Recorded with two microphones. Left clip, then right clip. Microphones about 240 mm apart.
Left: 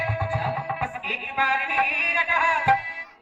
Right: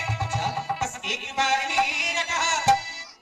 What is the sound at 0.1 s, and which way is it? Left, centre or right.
Music, right.